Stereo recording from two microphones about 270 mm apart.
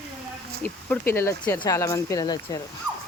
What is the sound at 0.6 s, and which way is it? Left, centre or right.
Speech, centre.